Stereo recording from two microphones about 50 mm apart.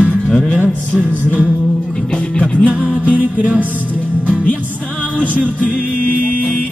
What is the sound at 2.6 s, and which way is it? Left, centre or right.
Music, right.